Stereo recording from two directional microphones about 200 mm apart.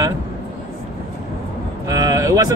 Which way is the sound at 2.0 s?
15° right (ahead or behind).